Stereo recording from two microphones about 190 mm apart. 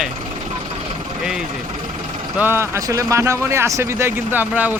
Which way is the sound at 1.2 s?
5° right (ahead or behind).